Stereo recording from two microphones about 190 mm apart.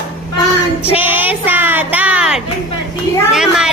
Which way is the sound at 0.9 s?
10° right (ahead or behind).